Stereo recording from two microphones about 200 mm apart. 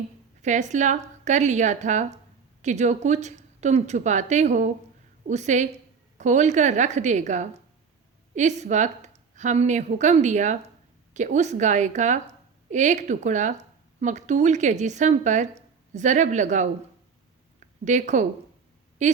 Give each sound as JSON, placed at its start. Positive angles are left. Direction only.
{"t": 0.4, "sound": "a woman's voice", "side_deg": -35}
{"t": 17.8, "sound": "a woman's voice", "side_deg": -35}